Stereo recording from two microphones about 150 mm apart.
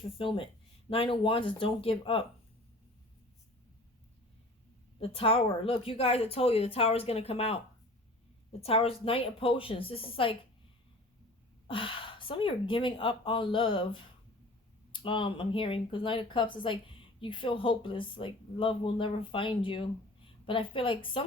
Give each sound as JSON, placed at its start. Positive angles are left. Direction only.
{"t": 0.2, "sound": "speech", "side_deg": 35}
{"t": 4.9, "sound": "speech", "side_deg": 40}
{"t": 8.6, "sound": "speech", "side_deg": 40}
{"t": 11.7, "sound": "speech", "side_deg": 35}